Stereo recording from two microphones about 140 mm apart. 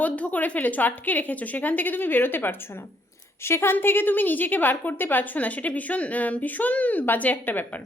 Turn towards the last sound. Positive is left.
turn(degrees=15)  # may be behind; listen again after turning